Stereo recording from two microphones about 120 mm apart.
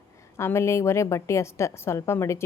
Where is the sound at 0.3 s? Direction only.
20° left (ahead or behind).